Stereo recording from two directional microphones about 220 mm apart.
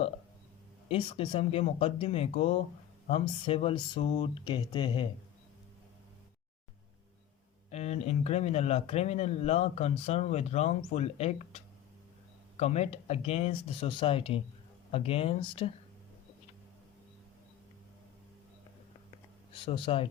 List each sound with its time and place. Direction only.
0.9 s speech: 25° left (ahead or behind)
7.7 s speech: 30° left (ahead or behind)
19.5 s speech: 25° left (ahead or behind)